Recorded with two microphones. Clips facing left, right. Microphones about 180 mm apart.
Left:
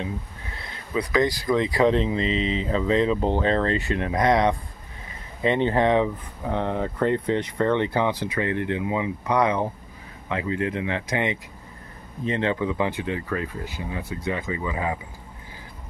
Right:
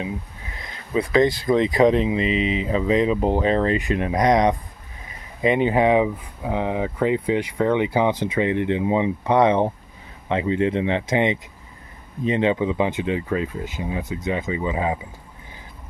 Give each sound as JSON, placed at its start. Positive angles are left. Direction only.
{"t": 0.9, "sound": "speech", "side_deg": -25}